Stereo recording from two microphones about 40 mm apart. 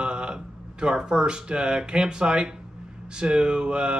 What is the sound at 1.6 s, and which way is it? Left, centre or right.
A man's voice, centre.